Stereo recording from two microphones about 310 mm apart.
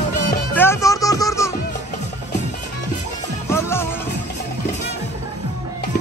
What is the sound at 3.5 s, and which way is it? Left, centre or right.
Music, centre.